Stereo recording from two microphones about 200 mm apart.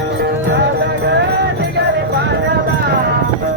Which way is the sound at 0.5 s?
55° right (ahead or behind).